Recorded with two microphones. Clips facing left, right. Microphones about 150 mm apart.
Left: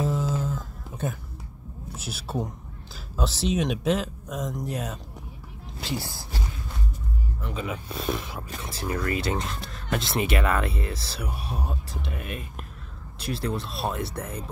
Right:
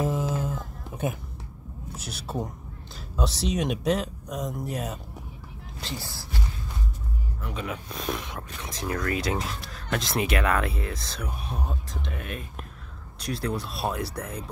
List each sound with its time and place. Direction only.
0.0 s a sound: 10° right (ahead or behind)
2.0 s speech: 5° left (ahead or behind)
7.4 s speech: centre (ahead or behind)